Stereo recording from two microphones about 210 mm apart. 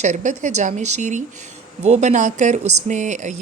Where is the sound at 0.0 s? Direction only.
35° right (ahead or behind).